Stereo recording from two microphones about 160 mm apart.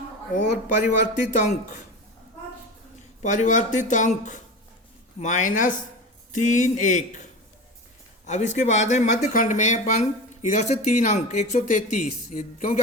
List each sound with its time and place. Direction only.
0.9 s speech: 50° left (ahead or behind)
3.2 s speech: 50° left (ahead or behind)
5.2 s speech: 50° left (ahead or behind)
8.3 s speech: 50° left (ahead or behind)